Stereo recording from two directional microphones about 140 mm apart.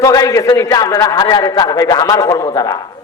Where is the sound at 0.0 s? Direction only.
25° left (ahead or behind).